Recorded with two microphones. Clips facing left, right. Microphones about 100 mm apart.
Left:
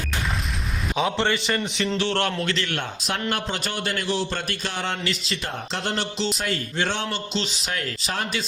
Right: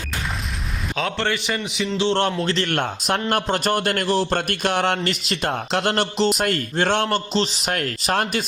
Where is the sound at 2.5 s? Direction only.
50° right (ahead or behind).